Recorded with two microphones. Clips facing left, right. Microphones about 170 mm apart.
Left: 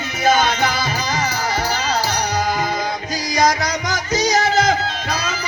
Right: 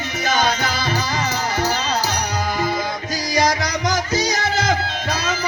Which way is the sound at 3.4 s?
50° left (ahead or behind).